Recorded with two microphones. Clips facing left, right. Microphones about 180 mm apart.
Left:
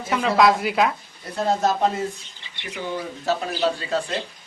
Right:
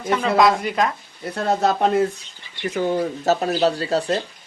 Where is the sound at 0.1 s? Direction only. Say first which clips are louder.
Right 1 dB; centre (ahead or behind).